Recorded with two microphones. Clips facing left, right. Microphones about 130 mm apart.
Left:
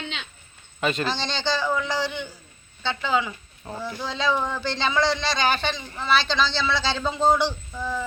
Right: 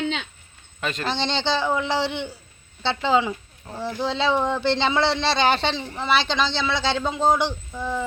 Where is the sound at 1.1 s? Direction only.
25° right (ahead or behind).